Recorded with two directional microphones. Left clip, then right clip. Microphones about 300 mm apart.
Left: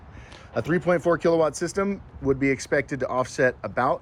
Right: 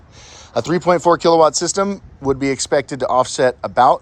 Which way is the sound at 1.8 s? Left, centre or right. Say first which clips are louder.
Right 7 dB; centre.